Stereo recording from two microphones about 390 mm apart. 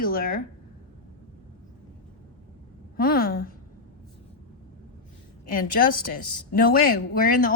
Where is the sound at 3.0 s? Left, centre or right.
Left.